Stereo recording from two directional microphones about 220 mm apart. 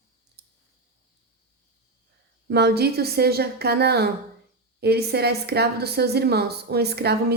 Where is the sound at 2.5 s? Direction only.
50° right (ahead or behind).